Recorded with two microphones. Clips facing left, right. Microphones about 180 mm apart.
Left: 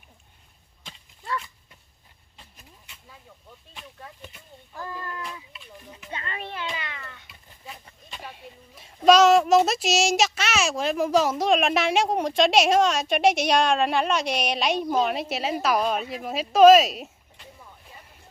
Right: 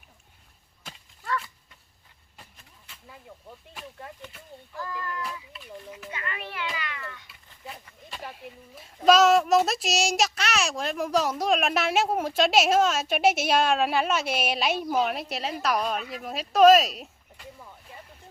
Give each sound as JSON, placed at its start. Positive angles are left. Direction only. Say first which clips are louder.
{"t": 4.8, "sound": "child singing", "louder": "right 1 dB", "side_deg": 25}
{"t": 5.9, "sound": "children playing", "louder": "left 2 dB", "side_deg": 30}
{"t": 8.1, "sound": "speech", "louder": "right 2 dB", "side_deg": 0}